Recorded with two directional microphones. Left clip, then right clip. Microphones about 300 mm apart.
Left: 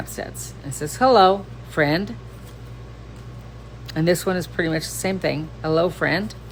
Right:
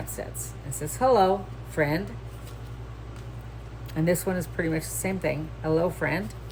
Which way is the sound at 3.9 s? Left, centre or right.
Centre.